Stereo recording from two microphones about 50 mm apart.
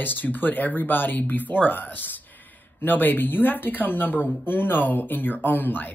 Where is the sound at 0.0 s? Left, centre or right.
Left.